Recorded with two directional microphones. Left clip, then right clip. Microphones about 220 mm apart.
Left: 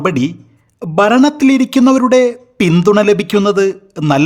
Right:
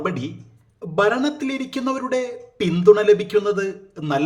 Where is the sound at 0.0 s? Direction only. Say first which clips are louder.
Left 10 dB; 45° left (ahead or behind).